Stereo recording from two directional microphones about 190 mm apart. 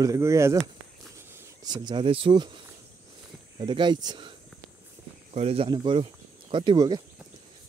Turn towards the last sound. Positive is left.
turn(degrees=-20)  # may be behind; listen again after turning